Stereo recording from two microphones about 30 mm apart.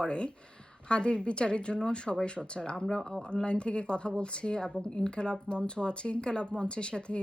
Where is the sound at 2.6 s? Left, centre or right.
Left.